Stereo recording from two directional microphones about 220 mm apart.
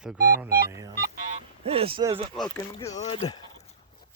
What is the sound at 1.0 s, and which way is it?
Music, 35° right (ahead or behind).